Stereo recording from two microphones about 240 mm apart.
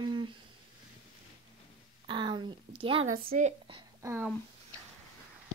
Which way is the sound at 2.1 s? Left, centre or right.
Centre.